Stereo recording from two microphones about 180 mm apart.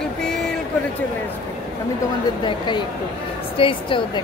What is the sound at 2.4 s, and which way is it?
A woman's voice, 25° left (ahead or behind).